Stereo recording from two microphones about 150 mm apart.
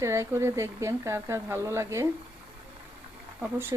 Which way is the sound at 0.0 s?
20° right (ahead or behind).